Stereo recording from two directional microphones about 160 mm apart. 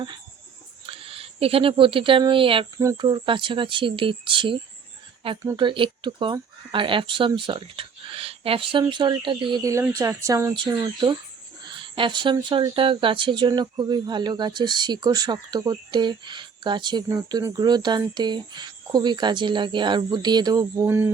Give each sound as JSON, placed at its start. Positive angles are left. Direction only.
{"t": 0.9, "sound": "speech", "side_deg": -35}
{"t": 5.5, "sound": "speech", "side_deg": -30}